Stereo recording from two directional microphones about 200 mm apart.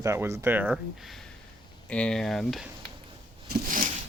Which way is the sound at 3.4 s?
40° right (ahead or behind).